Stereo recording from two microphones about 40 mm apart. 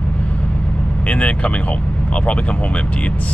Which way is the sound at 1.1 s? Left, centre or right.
Left.